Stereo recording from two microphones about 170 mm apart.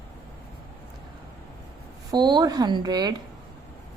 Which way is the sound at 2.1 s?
25° right (ahead or behind).